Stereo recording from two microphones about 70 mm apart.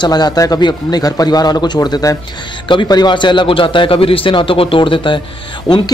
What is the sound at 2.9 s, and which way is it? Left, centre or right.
Speech, left.